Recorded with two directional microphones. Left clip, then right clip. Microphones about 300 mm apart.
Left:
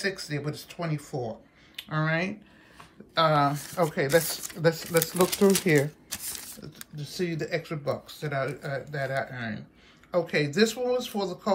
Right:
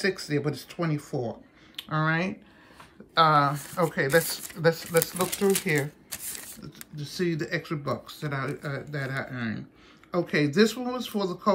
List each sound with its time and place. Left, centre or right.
0.0 s speech: centre